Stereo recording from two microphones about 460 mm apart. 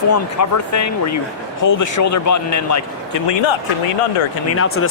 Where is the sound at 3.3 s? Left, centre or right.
Left.